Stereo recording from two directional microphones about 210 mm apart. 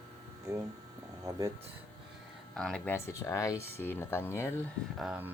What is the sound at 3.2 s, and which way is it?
Speech, 15° left (ahead or behind).